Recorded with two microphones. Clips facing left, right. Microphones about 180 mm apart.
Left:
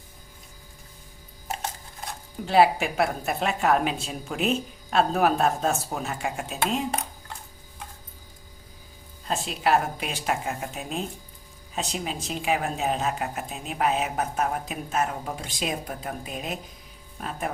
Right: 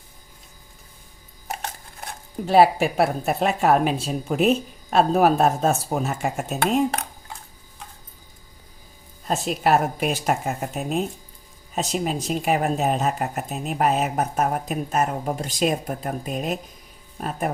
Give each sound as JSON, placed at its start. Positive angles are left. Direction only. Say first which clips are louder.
{"t": 2.0, "sound": "speech", "louder": "right 6 dB", "side_deg": -40}
{"t": 6.6, "sound": "speech", "louder": "right 6 dB", "side_deg": -65}
{"t": 9.2, "sound": "a woman's voice", "louder": "right 4 dB", "side_deg": -40}